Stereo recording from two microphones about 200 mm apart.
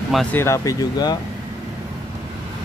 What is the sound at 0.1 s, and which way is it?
Speech, 5° left (ahead or behind).